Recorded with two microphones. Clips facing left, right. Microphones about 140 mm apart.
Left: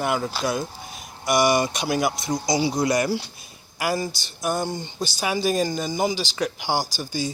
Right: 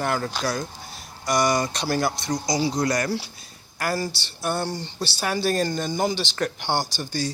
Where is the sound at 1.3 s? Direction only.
20° left (ahead or behind).